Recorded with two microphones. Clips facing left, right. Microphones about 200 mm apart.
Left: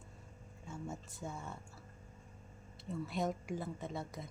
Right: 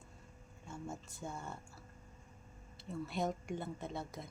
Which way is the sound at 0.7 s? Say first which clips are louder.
Left 1 dB; centre (ahead or behind).